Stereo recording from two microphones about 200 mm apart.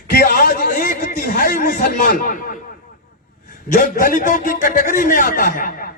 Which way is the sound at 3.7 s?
45° left (ahead or behind).